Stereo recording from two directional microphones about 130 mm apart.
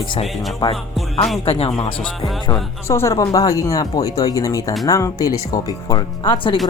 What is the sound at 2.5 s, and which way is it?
Speech, 20° left (ahead or behind).